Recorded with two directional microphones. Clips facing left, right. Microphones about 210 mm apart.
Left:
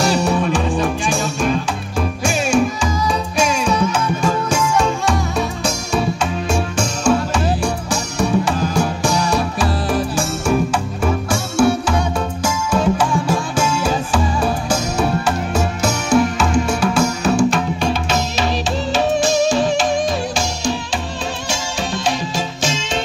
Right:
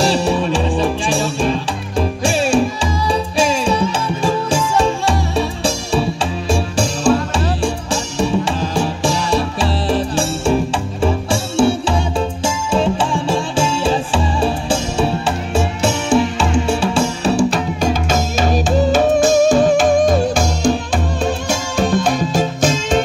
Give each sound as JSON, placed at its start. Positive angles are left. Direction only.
{"t": 0.0, "sound": "music", "side_deg": -30}